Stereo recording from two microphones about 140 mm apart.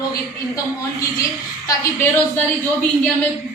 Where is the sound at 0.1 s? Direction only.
25° left (ahead or behind).